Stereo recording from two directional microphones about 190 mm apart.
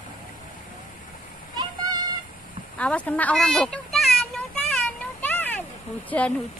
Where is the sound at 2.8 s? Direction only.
5° left (ahead or behind).